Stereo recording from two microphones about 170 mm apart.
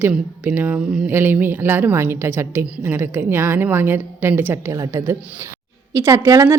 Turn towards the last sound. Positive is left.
turn(degrees=-20)  # may be behind; listen again after turning